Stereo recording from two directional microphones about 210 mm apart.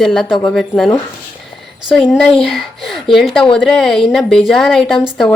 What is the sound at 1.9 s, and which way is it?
A woman's voice, centre (ahead or behind).